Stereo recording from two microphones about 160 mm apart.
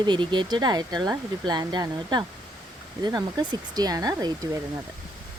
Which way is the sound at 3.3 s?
25° right (ahead or behind).